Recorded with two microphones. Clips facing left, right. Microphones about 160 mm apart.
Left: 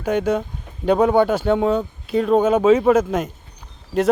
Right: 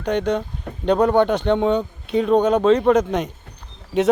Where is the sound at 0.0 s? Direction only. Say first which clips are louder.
Left 1 dB; 5° left (ahead or behind).